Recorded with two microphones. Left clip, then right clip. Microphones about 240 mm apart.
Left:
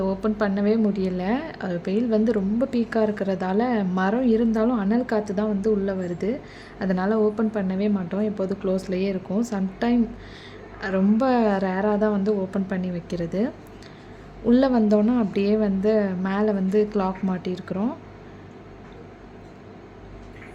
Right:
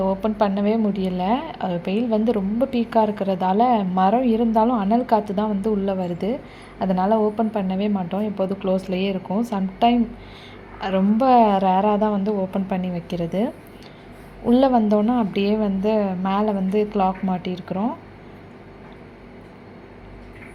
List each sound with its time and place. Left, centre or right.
0.0 s a woman's voice: centre